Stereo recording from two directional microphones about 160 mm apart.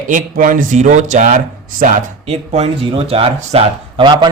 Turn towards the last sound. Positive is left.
turn(degrees=-30)  # may be behind; listen again after turning